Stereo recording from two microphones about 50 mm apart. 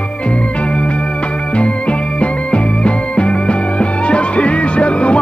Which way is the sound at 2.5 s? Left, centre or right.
Left.